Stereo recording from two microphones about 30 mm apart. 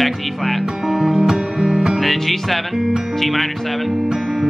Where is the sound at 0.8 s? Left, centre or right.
Centre.